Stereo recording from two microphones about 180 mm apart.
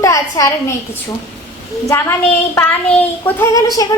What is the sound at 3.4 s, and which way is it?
Speech, 20° left (ahead or behind).